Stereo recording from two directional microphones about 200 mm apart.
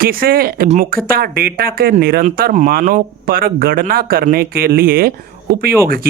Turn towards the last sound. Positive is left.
turn(degrees=-50)  # may be behind; listen again after turning